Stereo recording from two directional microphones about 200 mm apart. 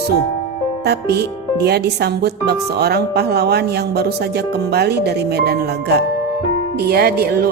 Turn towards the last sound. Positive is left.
turn(degrees=-50)  # may be behind; listen again after turning